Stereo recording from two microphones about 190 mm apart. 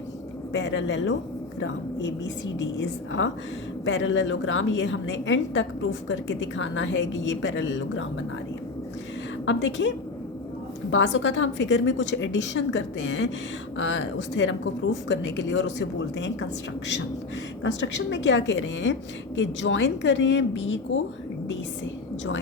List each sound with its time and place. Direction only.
0.5 s a woman's voice: 70° left (ahead or behind)
9.5 s a woman's voice: 75° left (ahead or behind)
10.9 s a woman's voice: 80° left
18.1 s a woman's voice: 70° left (ahead or behind)